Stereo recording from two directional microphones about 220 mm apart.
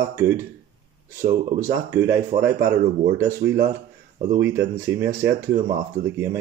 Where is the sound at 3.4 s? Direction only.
50° right (ahead or behind).